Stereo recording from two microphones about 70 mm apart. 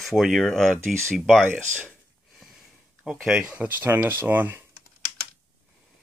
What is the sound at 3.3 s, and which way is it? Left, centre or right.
Speech, centre.